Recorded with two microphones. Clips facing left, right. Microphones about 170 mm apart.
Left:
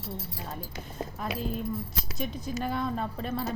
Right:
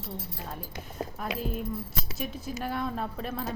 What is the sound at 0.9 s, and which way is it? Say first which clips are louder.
Speech: even; 5° right (ahead or behind).